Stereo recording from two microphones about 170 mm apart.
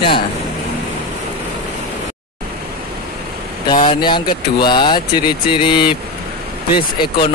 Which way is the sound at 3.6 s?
25° left (ahead or behind).